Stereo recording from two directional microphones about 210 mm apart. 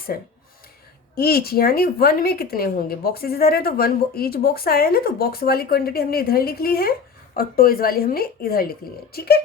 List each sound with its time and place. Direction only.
0.1 s a woman's voice: 45° left (ahead or behind)